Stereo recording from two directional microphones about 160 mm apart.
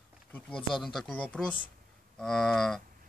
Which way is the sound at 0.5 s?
30° left (ahead or behind).